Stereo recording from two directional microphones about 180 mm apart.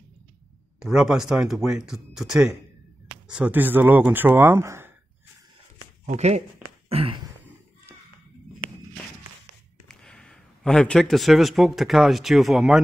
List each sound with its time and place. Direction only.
0.7 s speech: 5° right (ahead or behind)
6.0 s speech: 40° right (ahead or behind)
6.9 s a sound: 30° right (ahead or behind)
9.8 s speech: 5° left (ahead or behind)